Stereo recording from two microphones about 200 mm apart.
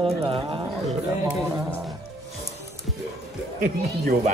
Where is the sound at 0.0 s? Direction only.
25° right (ahead or behind).